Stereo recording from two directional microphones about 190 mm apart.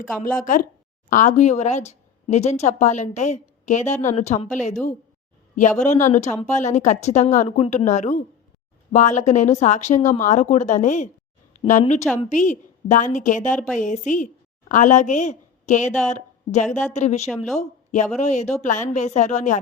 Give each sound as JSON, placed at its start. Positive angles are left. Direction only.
{"t": 0.2, "sound": "speech", "side_deg": 45}
{"t": 4.7, "sound": "a woman's voice", "side_deg": 5}
{"t": 5.5, "sound": "a woman's voice", "side_deg": 40}